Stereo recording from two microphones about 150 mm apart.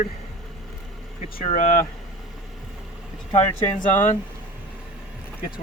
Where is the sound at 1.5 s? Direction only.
60° left (ahead or behind).